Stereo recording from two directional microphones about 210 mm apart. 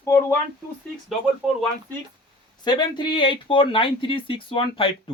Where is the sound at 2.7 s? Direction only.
20° left (ahead or behind).